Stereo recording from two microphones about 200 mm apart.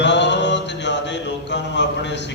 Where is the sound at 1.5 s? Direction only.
60° left (ahead or behind).